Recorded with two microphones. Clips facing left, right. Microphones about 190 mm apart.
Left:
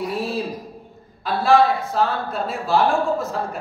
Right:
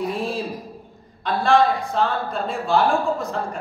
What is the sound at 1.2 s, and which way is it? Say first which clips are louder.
A woman's voice: left 1 dB; 5° left (ahead or behind).